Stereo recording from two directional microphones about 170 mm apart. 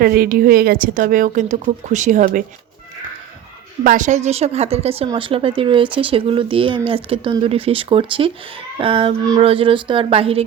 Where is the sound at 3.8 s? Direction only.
50° right (ahead or behind).